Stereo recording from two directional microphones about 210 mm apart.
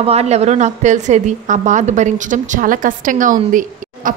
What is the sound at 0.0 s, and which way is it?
A woman's voice, 30° right (ahead or behind).